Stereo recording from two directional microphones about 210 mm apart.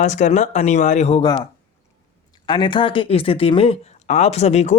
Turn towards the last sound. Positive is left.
turn(degrees=30)  # may be behind; listen again after turning